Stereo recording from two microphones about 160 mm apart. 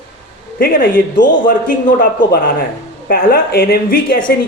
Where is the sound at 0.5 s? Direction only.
70° left (ahead or behind).